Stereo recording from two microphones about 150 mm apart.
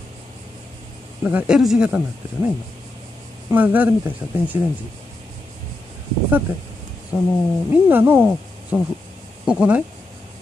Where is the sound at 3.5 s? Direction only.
10° right (ahead or behind).